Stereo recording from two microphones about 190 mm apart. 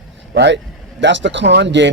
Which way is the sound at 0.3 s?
70° right (ahead or behind).